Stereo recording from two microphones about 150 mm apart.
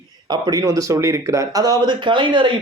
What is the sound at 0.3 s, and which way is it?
Speech, 25° right (ahead or behind).